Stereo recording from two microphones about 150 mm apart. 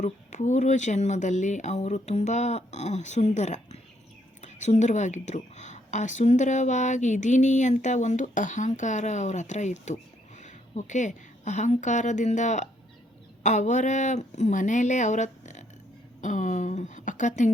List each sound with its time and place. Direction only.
0.0 s a woman's voice: 55° left (ahead or behind)